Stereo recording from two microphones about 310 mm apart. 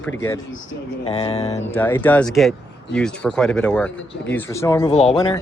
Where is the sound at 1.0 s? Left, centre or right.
Centre.